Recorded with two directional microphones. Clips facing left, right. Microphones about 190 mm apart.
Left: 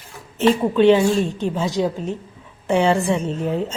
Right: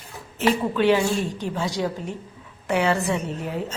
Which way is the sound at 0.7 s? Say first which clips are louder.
Left 7 dB; 25° left (ahead or behind).